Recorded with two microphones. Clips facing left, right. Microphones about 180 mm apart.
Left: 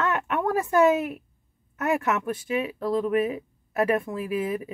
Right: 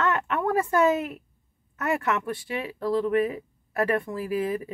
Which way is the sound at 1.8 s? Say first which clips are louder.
Left 2 dB; 20° left (ahead or behind).